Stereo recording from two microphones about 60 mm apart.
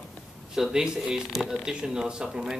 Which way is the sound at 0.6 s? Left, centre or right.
Centre.